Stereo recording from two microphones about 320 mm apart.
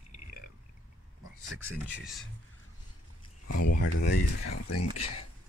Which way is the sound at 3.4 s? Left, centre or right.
Left.